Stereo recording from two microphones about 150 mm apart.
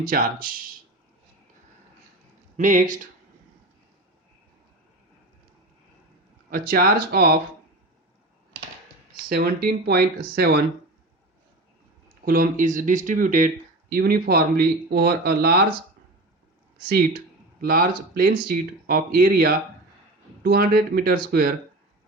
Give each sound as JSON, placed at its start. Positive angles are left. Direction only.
{"t": 0.0, "sound": "speech", "side_deg": -65}
{"t": 2.6, "sound": "speech", "side_deg": -60}
{"t": 6.5, "sound": "speech", "side_deg": -80}
{"t": 9.3, "sound": "speech", "side_deg": -90}
{"t": 12.2, "sound": "speech", "side_deg": -75}
{"t": 13.9, "sound": "speech", "side_deg": -90}
{"t": 17.6, "sound": "speech", "side_deg": -80}
{"t": 20.4, "sound": "speech", "side_deg": -85}